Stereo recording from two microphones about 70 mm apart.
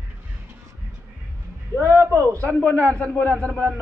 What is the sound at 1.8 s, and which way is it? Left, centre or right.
Speech, right.